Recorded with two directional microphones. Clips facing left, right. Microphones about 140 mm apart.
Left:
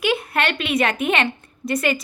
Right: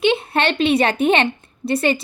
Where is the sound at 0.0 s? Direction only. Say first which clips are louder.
Right 4 dB; 25° right (ahead or behind).